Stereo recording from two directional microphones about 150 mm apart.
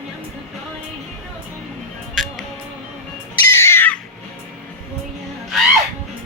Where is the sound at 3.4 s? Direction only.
15° left (ahead or behind).